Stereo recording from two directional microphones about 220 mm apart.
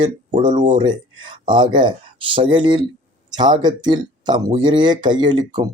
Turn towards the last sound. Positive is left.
turn(degrees=-20)  # may be behind; listen again after turning